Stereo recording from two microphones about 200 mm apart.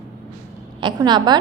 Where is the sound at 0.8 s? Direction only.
20° right (ahead or behind).